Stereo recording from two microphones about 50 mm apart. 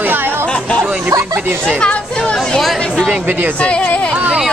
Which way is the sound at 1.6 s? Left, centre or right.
Centre.